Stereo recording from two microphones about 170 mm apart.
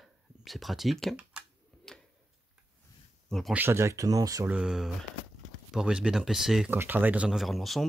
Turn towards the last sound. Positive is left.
turn(degrees=0)  # may be behind; listen again after turning